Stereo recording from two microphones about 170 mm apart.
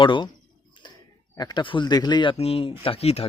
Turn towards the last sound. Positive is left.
turn(degrees=35)  # may be behind; listen again after turning